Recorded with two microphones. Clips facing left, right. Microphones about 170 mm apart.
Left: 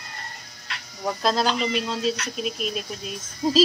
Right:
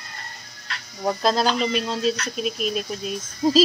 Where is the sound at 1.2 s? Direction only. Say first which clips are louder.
Right 1 dB; centre (ahead or behind).